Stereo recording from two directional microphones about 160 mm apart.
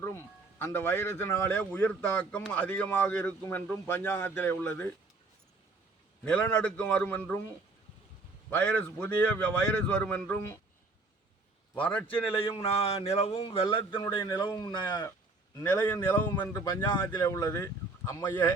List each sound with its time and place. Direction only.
0.0 s speech: 15° left (ahead or behind)
6.2 s speech: 10° left (ahead or behind)
11.7 s speech: 10° left (ahead or behind)
12.4 s a man's voice: 40° left (ahead or behind); by 18.5 s 15° left (ahead or behind)